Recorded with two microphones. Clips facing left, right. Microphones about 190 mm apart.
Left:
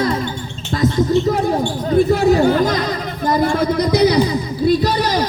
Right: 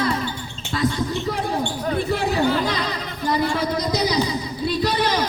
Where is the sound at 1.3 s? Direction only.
45° left (ahead or behind).